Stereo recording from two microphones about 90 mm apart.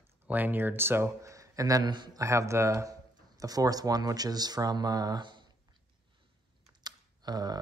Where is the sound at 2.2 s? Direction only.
35° right (ahead or behind); by 5.4 s 55° right (ahead or behind).